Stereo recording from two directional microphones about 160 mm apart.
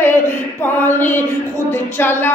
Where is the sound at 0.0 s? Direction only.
10° left (ahead or behind).